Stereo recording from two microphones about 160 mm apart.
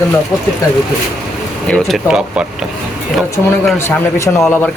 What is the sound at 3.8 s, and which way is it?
Speech, 15° left (ahead or behind).